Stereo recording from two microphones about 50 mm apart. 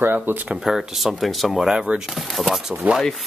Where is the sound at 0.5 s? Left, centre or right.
Centre.